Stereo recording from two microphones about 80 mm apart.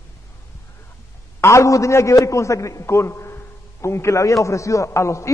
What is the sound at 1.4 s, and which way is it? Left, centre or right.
A man's voice, left.